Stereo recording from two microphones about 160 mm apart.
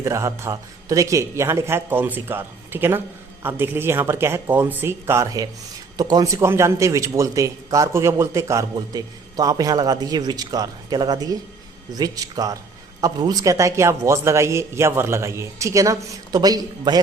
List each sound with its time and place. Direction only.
0.0 s a man's voice: 20° right (ahead or behind)